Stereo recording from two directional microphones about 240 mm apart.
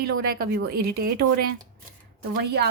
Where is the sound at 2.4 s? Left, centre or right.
Right.